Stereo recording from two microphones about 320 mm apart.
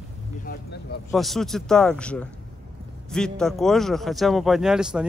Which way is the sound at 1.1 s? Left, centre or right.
Centre.